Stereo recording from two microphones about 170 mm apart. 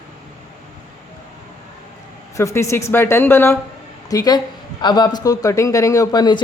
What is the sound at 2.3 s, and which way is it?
A woman's voice, 15° left (ahead or behind).